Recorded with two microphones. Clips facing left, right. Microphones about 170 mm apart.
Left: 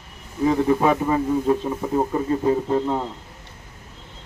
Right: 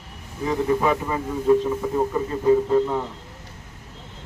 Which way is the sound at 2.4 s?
25° left (ahead or behind).